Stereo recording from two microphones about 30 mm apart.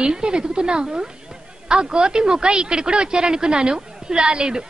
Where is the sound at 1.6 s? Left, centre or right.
Right.